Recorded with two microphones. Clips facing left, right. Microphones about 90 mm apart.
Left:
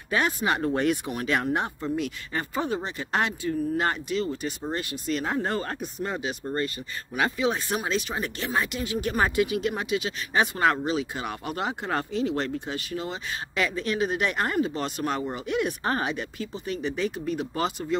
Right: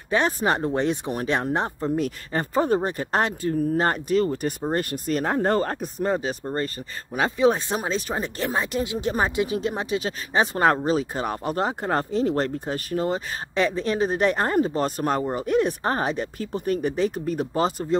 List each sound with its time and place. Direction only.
0.1 s speech: 35° right (ahead or behind)
0.6 s speech: 25° right (ahead or behind); by 8.5 s 40° right (ahead or behind)
8.8 s speech: 25° right (ahead or behind)